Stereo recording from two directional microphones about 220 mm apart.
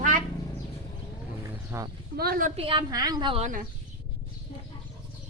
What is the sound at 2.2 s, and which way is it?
Speech, 40° right (ahead or behind).